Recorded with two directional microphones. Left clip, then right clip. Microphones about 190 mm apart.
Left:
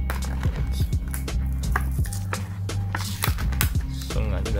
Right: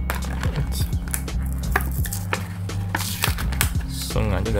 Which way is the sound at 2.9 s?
10° right (ahead or behind).